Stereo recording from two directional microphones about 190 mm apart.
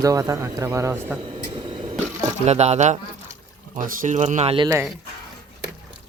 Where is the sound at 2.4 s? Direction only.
35° right (ahead or behind).